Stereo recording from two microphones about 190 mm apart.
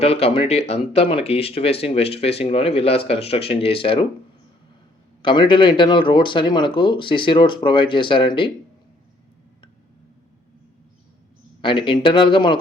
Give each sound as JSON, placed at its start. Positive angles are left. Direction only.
{"t": 0.0, "sound": "speech", "side_deg": 30}
{"t": 5.2, "sound": "speech", "side_deg": 25}
{"t": 11.6, "sound": "speech", "side_deg": 25}